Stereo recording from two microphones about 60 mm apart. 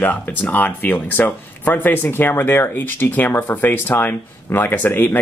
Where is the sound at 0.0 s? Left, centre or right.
Left.